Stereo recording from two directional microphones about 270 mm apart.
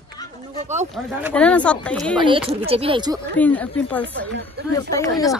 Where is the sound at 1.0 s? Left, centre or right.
Centre.